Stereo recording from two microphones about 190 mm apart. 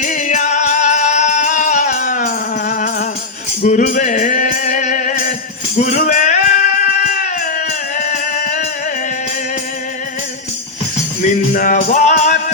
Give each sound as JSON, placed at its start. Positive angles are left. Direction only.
{"t": 0.0, "sound": "music", "side_deg": 40}
{"t": 7.9, "sound": "music", "side_deg": 40}
{"t": 11.2, "sound": "music", "side_deg": 40}